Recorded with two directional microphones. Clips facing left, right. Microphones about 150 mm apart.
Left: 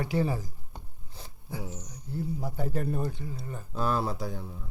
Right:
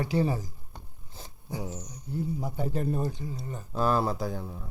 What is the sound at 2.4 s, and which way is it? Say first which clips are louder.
Speech: right 1 dB; 20° right (ahead or behind).